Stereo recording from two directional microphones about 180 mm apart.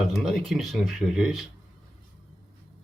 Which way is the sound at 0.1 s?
Centre (ahead or behind).